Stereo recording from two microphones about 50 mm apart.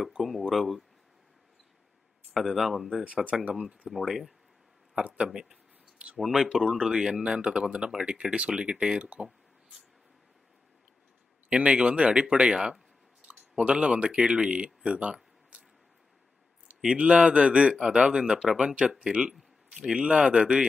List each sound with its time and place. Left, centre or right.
0.2 s speech: centre
2.3 s speech: centre
4.9 s speech: right
5.3 s speech: centre
9.2 s a sound: centre
11.5 s speech: right
12.5 s speech: centre
13.3 s speech: centre
16.8 s speech: centre